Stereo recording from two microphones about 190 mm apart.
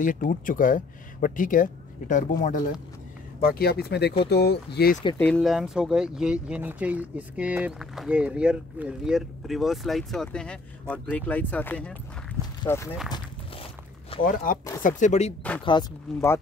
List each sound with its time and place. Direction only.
0.0 s speech: 45° left (ahead or behind)
5.1 s speech: 5° left (ahead or behind)
14.2 s speech: 45° left (ahead or behind)
15.6 s speech: 25° left (ahead or behind)